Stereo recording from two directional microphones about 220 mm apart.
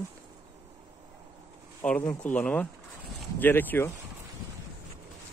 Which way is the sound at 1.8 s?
10° left (ahead or behind).